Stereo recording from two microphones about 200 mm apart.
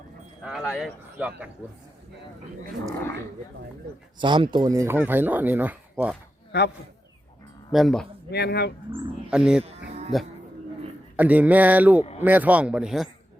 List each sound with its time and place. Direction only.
0.4 s speech: centre (ahead or behind)
4.2 s speech: 25° right (ahead or behind); by 6.1 s 10° right (ahead or behind)
6.5 s speech: 55° left (ahead or behind)
7.7 s speech: centre (ahead or behind)
8.3 s speech: 55° left (ahead or behind)
8.9 s speech: 5° right (ahead or behind)